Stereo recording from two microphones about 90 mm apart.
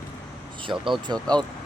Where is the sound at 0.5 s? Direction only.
65° right (ahead or behind).